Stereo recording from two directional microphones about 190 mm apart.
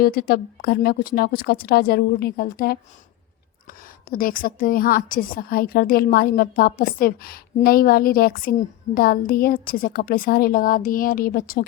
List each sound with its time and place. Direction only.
0.0 s a woman's voice: 50° left (ahead or behind)
4.1 s a woman's voice: 50° left (ahead or behind)